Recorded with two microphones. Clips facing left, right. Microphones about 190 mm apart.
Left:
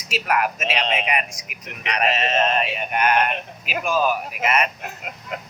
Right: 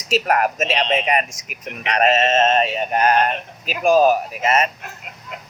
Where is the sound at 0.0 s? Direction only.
40° right (ahead or behind).